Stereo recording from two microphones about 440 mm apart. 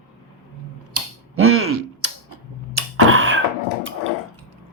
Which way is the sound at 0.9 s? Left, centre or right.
Right.